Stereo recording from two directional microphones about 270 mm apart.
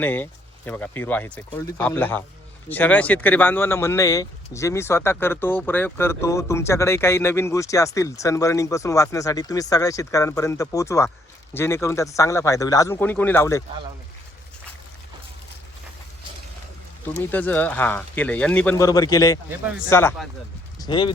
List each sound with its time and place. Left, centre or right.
0.0 s speech: centre
17.3 s speech: centre
19.5 s speech: centre
19.9 s speech: centre